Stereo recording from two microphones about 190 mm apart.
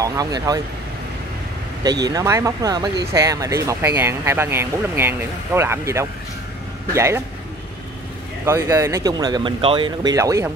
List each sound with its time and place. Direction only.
0.0 s speech: 20° right (ahead or behind)
1.8 s speech: 20° right (ahead or behind)
8.5 s speech: 15° right (ahead or behind)